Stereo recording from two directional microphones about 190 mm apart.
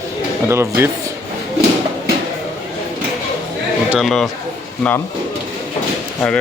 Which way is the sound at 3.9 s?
Centre (ahead or behind).